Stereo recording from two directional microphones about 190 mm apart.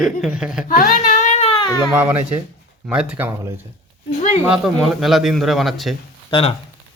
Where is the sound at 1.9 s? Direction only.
10° right (ahead or behind).